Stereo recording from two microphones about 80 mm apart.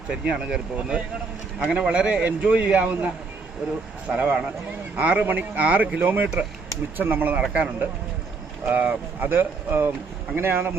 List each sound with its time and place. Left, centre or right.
0.1 s a man's voice: centre
4.1 s speech: right